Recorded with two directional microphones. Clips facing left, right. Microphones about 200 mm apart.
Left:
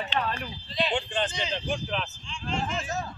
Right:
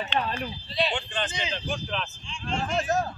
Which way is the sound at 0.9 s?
30° left (ahead or behind).